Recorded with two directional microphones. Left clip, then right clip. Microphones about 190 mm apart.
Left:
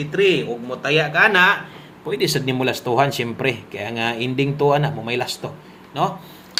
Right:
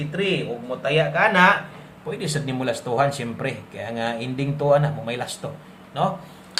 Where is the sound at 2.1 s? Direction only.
30° left (ahead or behind).